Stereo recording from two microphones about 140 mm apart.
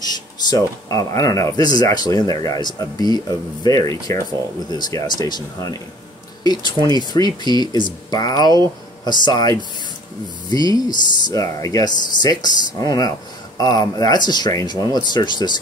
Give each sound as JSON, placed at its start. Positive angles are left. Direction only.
{"t": 0.0, "sound": "speech", "side_deg": 30}